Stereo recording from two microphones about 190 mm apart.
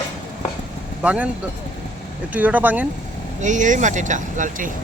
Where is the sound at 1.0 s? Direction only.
5° right (ahead or behind).